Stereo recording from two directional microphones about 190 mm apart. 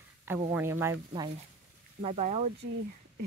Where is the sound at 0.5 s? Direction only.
10° right (ahead or behind).